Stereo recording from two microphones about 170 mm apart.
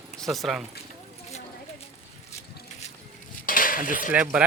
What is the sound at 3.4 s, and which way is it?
Dishes, 55° left (ahead or behind).